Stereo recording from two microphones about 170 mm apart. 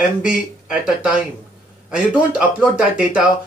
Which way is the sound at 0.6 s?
5° right (ahead or behind).